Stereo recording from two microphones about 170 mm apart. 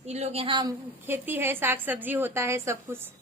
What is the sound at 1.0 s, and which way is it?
A woman's voice, 10° right (ahead or behind).